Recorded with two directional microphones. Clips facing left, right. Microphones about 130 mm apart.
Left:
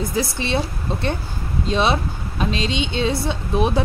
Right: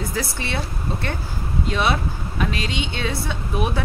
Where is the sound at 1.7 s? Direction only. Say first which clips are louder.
Left 3 dB; 25° left (ahead or behind).